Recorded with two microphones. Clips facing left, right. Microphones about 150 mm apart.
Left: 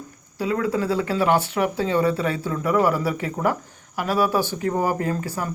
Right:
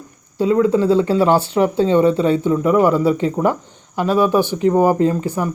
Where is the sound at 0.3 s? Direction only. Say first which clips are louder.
Right 8 dB; 25° right (ahead or behind).